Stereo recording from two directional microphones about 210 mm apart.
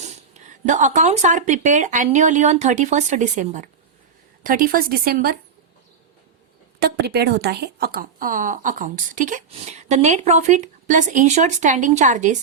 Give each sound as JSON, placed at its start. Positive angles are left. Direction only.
{"t": 0.0, "sound": "speech", "side_deg": -35}
{"t": 6.7, "sound": "speech", "side_deg": -50}